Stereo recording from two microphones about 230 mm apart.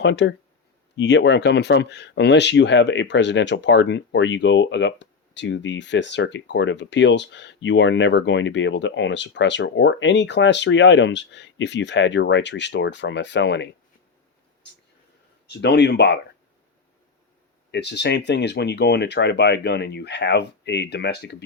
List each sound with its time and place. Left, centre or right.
0.0 s speech: left
15.4 s speech: left
17.7 s speech: left